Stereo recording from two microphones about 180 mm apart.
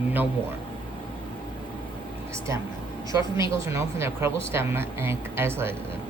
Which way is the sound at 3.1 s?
20° right (ahead or behind).